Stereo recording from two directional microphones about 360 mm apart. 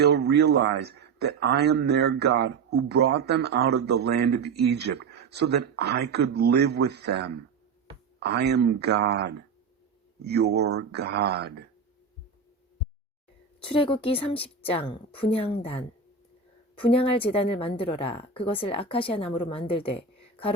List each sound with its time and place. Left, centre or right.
0.0 s a man's voice: right
10.2 s a man's voice: right
13.7 s speech: centre